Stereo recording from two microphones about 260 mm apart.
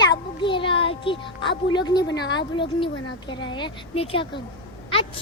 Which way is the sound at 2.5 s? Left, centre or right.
Centre.